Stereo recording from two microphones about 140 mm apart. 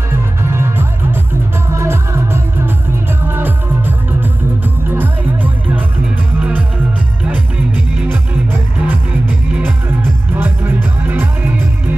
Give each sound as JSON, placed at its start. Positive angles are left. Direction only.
{"t": 0.5, "sound": "music", "side_deg": -15}
{"t": 7.2, "sound": "music", "side_deg": -10}
{"t": 10.3, "sound": "music", "side_deg": -15}